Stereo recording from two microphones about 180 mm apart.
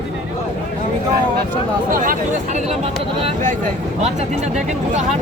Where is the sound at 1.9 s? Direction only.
50° right (ahead or behind).